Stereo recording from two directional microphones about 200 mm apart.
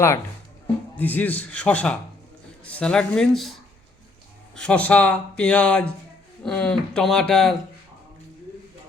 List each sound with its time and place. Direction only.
0.9 s a man's voice: 10° left (ahead or behind)